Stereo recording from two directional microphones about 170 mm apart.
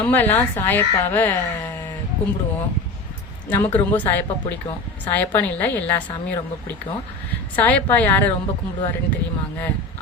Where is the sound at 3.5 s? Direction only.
10° left (ahead or behind).